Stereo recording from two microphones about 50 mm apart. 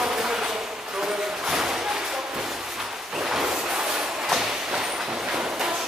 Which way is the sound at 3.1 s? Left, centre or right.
Centre.